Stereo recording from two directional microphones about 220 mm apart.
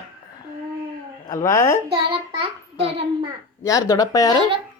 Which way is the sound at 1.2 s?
15° left (ahead or behind).